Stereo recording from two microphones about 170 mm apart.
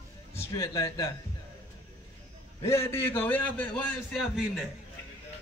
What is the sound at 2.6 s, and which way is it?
A man's voice, 15° left (ahead or behind).